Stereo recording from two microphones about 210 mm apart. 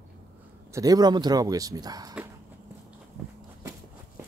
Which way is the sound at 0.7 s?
15° right (ahead or behind).